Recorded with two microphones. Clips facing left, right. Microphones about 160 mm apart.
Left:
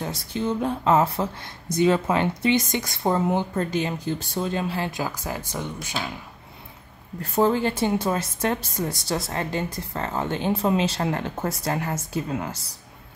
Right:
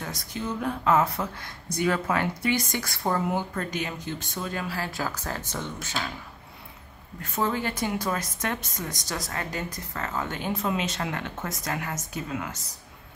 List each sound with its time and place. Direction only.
0.0 s speech: 30° left (ahead or behind)
7.2 s a woman's voice: 35° left (ahead or behind)